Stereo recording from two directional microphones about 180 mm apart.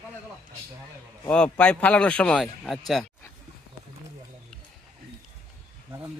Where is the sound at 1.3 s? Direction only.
5° left (ahead or behind).